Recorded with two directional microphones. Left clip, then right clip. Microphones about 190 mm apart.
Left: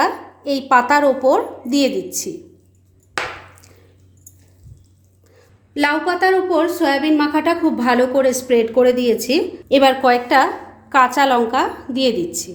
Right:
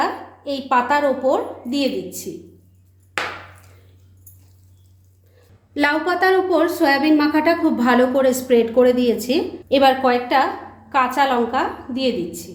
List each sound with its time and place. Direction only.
0.0 s a woman's voice: 35° left (ahead or behind)
5.7 s a woman's voice: 15° left (ahead or behind); by 12.5 s 35° left (ahead or behind)